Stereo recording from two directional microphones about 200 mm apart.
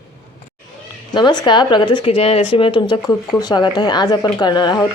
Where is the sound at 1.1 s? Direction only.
20° left (ahead or behind).